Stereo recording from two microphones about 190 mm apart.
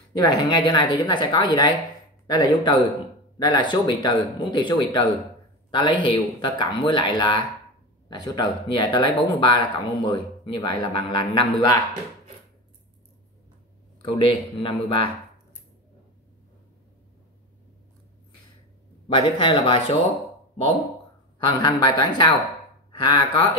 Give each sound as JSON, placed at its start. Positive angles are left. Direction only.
{"t": 0.1, "sound": "a man's voice", "side_deg": 20}
{"t": 14.0, "sound": "a man's voice", "side_deg": 25}
{"t": 19.0, "sound": "a man's voice", "side_deg": 25}
{"t": 21.5, "sound": "a man's voice", "side_deg": 20}